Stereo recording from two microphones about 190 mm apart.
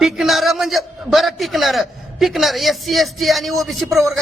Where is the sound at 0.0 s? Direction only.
Centre (ahead or behind).